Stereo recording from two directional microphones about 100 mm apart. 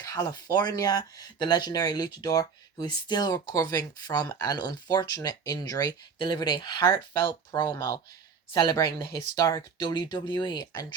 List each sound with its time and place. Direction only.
0.0 s speech: 35° left (ahead or behind)
6.1 s speech: 50° left (ahead or behind)
6.8 s speech: 30° left (ahead or behind)
7.5 s speech: 40° left (ahead or behind)
9.9 s speech: 50° left (ahead or behind)